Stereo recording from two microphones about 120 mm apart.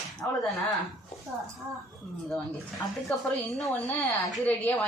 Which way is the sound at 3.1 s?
10° left (ahead or behind).